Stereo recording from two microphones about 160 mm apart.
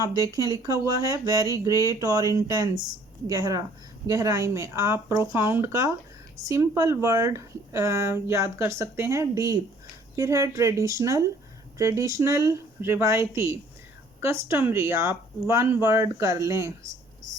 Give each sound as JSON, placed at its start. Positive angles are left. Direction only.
{"t": 0.0, "sound": "speech", "side_deg": -20}